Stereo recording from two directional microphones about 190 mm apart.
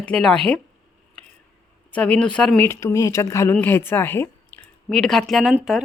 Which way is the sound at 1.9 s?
5° left (ahead or behind).